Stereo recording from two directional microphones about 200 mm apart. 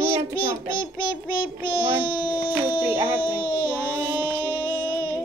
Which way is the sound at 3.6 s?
10° right (ahead or behind).